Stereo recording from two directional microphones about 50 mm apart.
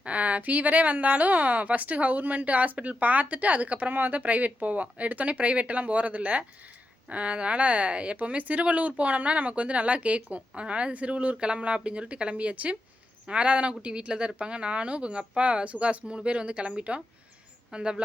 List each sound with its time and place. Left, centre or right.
0.0 s speech: right